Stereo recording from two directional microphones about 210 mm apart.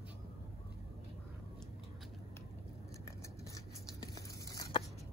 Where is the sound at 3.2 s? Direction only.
15° left (ahead or behind).